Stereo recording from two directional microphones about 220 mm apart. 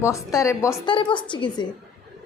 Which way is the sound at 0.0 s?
15° left (ahead or behind).